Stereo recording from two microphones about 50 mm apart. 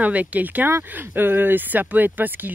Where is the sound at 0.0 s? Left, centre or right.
Right.